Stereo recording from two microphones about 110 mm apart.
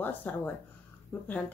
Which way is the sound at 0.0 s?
15° left (ahead or behind).